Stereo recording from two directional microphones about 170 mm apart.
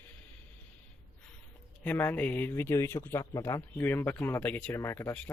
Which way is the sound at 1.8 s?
10° left (ahead or behind).